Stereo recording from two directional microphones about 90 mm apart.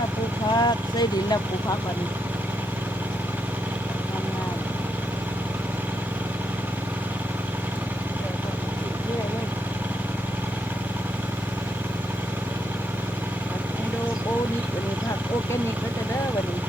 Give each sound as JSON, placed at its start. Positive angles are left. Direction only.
{"t": 0.6, "sound": "speech", "side_deg": 50}